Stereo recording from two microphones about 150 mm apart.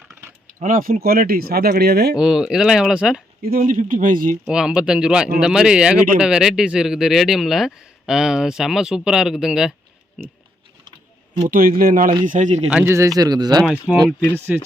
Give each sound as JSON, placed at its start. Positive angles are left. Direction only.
{"t": 0.1, "sound": "typing", "side_deg": -15}
{"t": 0.6, "sound": "speech", "side_deg": -70}
{"t": 1.0, "sound": "speech", "side_deg": -85}
{"t": 2.1, "sound": "speech", "side_deg": -5}
{"t": 3.4, "sound": "speech", "side_deg": -70}
{"t": 4.4, "sound": "speech", "side_deg": -5}
{"t": 11.4, "sound": "speech", "side_deg": -70}
{"t": 12.2, "sound": "speech", "side_deg": -55}
{"t": 12.7, "sound": "speech", "side_deg": -15}
{"t": 13.6, "sound": "speech", "side_deg": 0}